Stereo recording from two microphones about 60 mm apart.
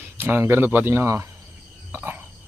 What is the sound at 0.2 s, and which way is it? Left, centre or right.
Speech, right.